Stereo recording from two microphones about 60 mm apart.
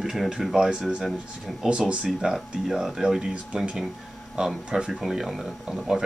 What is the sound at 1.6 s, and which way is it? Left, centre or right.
Speech, centre.